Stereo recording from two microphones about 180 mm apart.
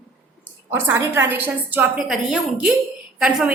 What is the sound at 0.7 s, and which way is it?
A woman's voice, 15° right (ahead or behind).